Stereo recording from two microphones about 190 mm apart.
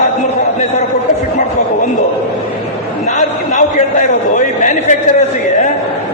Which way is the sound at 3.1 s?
40° left (ahead or behind).